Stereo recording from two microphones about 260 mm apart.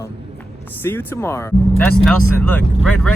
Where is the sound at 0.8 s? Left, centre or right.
Centre.